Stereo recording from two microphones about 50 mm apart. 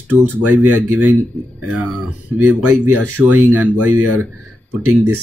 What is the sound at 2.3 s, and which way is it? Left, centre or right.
Speech, right.